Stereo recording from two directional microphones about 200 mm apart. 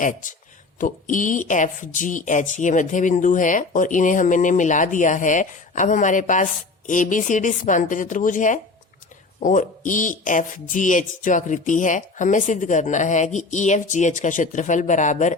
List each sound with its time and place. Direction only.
0.0 s speech: 40° left (ahead or behind)